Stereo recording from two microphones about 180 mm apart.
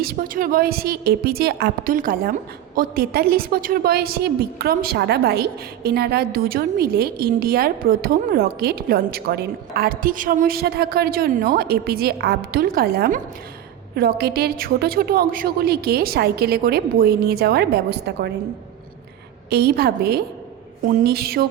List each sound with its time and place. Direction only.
0.0 s a woman's voice: 55° right (ahead or behind)
19.5 s a woman's voice: 65° right (ahead or behind)